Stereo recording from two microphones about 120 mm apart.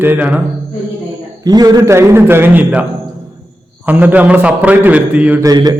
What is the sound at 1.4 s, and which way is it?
Speech, 35° right (ahead or behind).